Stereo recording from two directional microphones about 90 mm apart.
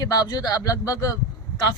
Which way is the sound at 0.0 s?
45° left (ahead or behind).